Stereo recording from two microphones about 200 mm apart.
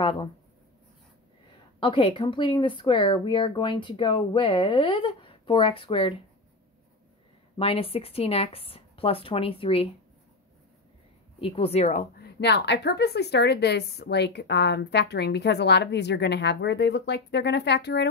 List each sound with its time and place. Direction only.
0.0 s speech: 25° left (ahead or behind)
1.8 s speech: 25° left (ahead or behind)
7.5 s speech: 30° left (ahead or behind)
11.4 s a woman's voice: 30° left (ahead or behind); by 18.0 s 60° left (ahead or behind)